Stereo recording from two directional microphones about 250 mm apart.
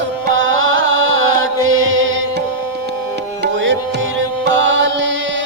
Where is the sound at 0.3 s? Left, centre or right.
Right.